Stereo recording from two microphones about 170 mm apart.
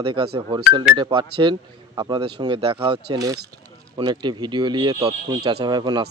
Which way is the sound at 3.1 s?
20° right (ahead or behind).